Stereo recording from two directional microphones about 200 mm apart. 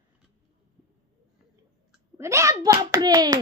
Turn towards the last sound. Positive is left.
turn(degrees=-20)  # may be behind; listen again after turning